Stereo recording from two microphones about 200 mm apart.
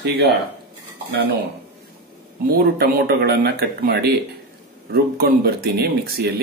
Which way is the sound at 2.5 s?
50° right (ahead or behind).